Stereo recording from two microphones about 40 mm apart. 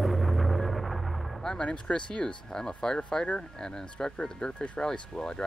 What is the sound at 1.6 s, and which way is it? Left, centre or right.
Speech, left.